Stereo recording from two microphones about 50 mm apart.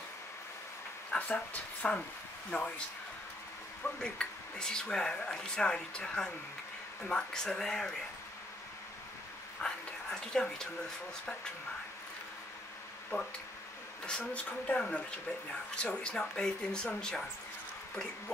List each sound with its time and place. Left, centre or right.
1.1 s speech: left
4.0 s speech: centre
9.6 s a sound: centre
13.1 s speech: left
14.3 s speech: left